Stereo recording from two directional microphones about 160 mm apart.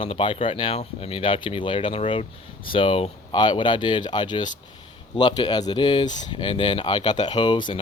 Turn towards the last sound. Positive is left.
turn(degrees=30)  # may be behind; listen again after turning